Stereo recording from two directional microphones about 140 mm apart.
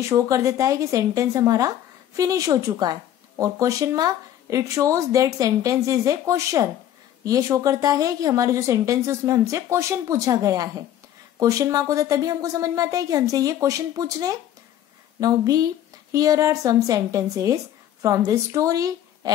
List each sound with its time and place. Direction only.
0.0 s a woman's voice: 20° right (ahead or behind)